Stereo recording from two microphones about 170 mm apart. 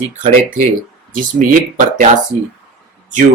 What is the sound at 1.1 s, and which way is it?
Speech, 55° right (ahead or behind).